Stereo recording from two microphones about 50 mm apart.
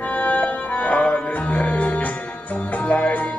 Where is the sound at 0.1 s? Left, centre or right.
Left.